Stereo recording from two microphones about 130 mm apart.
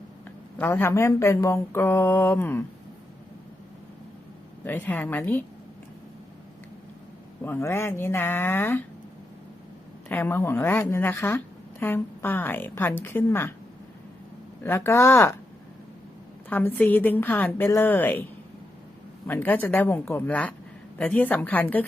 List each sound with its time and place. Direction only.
0.6 s a woman's voice: 15° left (ahead or behind)
4.6 s a woman's voice: 15° left (ahead or behind)
7.4 s a woman's voice: 15° left (ahead or behind)
10.1 s a woman's voice: 15° left (ahead or behind)
14.6 s speech: 20° left (ahead or behind)
16.5 s a woman's voice: 15° left (ahead or behind)
19.3 s a woman's voice: 15° left (ahead or behind)